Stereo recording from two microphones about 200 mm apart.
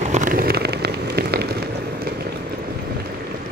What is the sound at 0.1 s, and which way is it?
Rain on surface, 40° right (ahead or behind).